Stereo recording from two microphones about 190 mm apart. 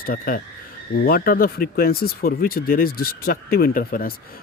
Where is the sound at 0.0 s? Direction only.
50° left (ahead or behind).